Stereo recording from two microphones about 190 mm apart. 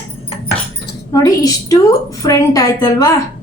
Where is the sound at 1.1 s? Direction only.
20° left (ahead or behind).